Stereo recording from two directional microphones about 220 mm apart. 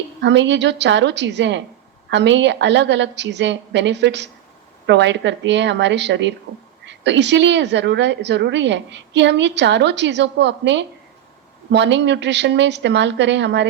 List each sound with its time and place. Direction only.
0.2 s a woman's voice: 55° right (ahead or behind)